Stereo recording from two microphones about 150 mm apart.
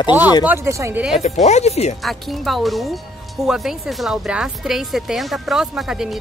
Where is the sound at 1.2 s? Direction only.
50° left (ahead or behind).